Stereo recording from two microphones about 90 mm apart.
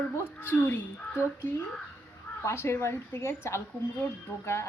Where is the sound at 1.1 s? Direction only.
30° left (ahead or behind).